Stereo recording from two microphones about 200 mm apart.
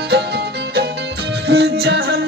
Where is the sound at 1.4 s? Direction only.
55° right (ahead or behind).